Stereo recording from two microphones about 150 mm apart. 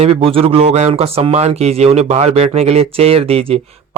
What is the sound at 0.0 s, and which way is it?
Speech, 40° right (ahead or behind).